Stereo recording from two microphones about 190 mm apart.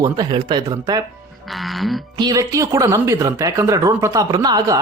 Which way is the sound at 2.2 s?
20° right (ahead or behind).